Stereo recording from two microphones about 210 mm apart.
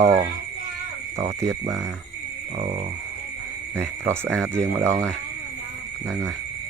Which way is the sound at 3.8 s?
5° left (ahead or behind).